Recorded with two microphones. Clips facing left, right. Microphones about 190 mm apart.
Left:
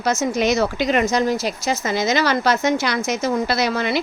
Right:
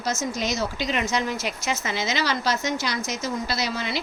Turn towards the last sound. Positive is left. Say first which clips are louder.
# left 8 dB
turn(degrees=55)  # may be behind; listen again after turning